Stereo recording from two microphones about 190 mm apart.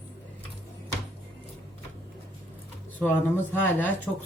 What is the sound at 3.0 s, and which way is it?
Speech, 10° left (ahead or behind).